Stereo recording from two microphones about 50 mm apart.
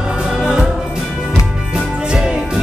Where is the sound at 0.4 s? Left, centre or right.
Centre.